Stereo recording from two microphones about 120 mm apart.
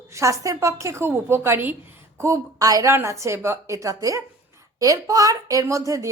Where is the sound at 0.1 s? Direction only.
25° right (ahead or behind).